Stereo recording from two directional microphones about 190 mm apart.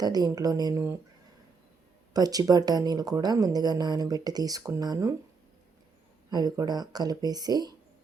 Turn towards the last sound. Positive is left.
turn(degrees=-20)  # may be behind; listen again after turning